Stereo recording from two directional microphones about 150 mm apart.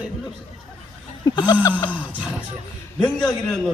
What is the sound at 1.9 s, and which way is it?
Speech, 10° right (ahead or behind).